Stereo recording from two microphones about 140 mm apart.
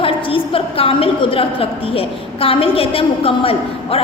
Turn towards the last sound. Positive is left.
turn(degrees=40)  # may be behind; listen again after turning